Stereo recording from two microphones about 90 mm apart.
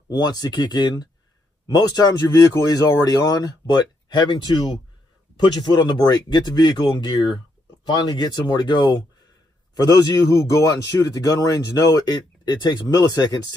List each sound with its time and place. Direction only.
0.1 s speech: 45° left (ahead or behind)
9.8 s speech: 45° left (ahead or behind)